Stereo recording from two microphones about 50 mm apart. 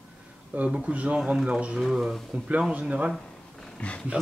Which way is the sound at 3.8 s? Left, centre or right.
Left.